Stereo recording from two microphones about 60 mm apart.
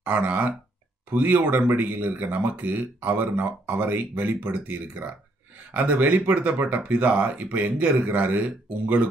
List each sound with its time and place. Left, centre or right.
0.0 s speech: right